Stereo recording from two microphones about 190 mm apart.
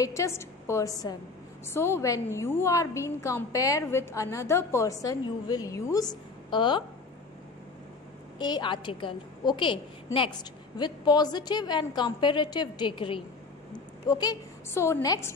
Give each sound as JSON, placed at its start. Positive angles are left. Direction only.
{"t": 0.0, "sound": "a woman's voice", "side_deg": 15}
{"t": 8.4, "sound": "a woman's voice", "side_deg": 20}
{"t": 10.8, "sound": "a woman's voice", "side_deg": 20}